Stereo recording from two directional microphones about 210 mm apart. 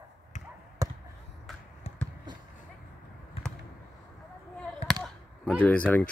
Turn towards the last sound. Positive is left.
turn(degrees=10)  # may be behind; listen again after turning